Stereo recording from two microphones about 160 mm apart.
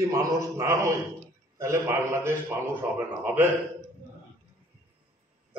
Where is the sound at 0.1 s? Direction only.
20° right (ahead or behind).